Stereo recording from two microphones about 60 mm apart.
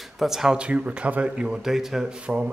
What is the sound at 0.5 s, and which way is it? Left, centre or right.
Speech, centre.